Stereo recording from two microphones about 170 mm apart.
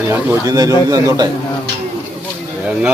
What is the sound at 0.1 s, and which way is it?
A man's voice, 15° right (ahead or behind).